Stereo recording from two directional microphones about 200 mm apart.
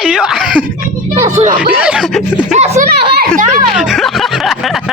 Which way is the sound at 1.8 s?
5° right (ahead or behind).